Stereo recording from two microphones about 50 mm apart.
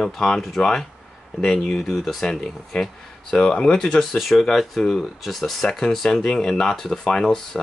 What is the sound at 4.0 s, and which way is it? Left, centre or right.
Speech, centre.